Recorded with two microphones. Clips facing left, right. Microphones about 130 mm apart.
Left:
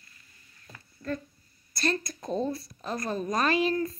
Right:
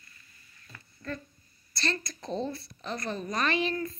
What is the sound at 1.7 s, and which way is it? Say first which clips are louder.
A woman's voice: left 4 dB; 45° left (ahead or behind).